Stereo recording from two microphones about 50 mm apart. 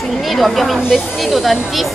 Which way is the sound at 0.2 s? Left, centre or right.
Centre.